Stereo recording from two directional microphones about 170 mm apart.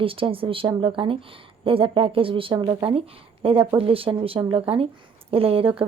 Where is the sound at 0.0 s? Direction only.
30° right (ahead or behind).